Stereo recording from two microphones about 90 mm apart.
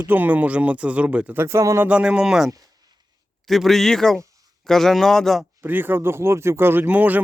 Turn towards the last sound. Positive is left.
turn(degrees=-20)  # may be behind; listen again after turning